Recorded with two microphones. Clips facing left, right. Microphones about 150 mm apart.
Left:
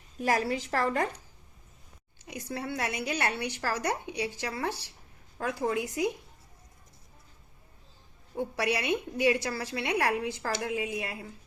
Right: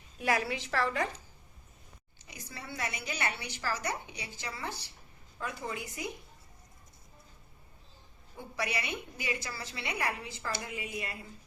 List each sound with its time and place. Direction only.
0.2 s a woman's voice: 40° left (ahead or behind)
2.2 s a woman's voice: 60° left (ahead or behind)
5.4 s a woman's voice: 85° left
8.4 s a woman's voice: 70° left (ahead or behind); by 11.3 s 90° left